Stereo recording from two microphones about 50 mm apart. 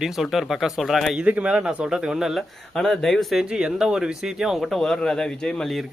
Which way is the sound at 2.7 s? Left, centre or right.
Centre.